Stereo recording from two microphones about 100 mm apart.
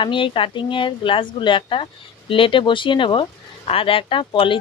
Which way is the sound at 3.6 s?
70° left (ahead or behind).